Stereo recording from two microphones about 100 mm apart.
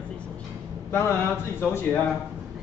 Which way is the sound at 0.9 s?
25° left (ahead or behind).